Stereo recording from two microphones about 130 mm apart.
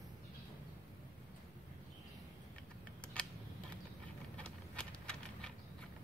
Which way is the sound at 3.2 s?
10° left (ahead or behind).